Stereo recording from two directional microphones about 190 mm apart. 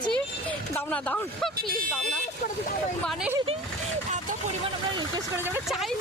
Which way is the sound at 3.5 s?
30° right (ahead or behind).